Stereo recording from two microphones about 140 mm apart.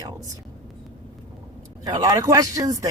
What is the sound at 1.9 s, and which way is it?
Speech, 25° right (ahead or behind).